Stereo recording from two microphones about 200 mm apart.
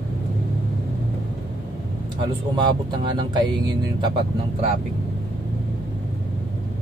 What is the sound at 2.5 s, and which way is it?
Speech, 20° right (ahead or behind).